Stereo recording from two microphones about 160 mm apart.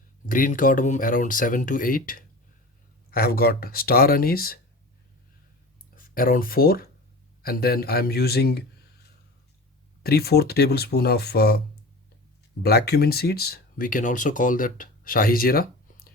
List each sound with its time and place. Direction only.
0.3 s speech: 60° left (ahead or behind)
6.0 s speech: 60° left (ahead or behind); by 8.6 s 80° left
10.0 s speech: 75° left (ahead or behind)
12.6 s speech: 85° left; by 16.0 s 65° left (ahead or behind)